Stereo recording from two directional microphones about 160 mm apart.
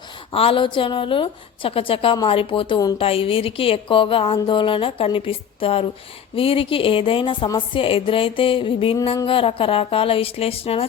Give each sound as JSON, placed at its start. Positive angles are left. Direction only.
{"t": 0.3, "sound": "a woman's voice", "side_deg": 35}